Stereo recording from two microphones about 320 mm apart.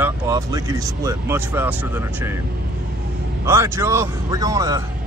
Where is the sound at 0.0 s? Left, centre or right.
Centre.